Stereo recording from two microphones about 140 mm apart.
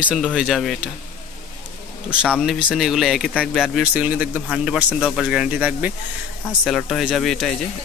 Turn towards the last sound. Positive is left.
turn(degrees=5)  # may be behind; listen again after turning